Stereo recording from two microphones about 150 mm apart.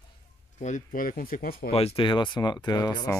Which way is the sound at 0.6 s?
60° left (ahead or behind).